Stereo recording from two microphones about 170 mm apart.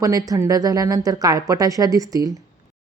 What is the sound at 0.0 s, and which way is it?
A woman's voice, 20° right (ahead or behind).